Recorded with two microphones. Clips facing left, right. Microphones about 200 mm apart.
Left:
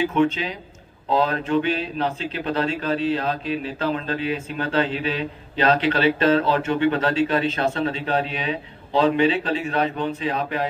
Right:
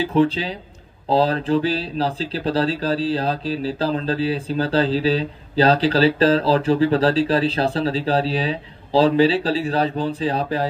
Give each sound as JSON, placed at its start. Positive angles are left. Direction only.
{"t": 0.0, "sound": "speech", "side_deg": -35}